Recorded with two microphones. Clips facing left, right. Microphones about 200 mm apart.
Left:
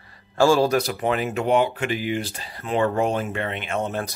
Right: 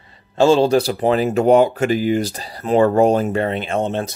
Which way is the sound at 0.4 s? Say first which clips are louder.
Right 4 dB; 25° right (ahead or behind).